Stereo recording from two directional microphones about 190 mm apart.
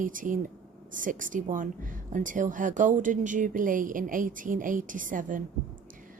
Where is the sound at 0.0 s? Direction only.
45° right (ahead or behind).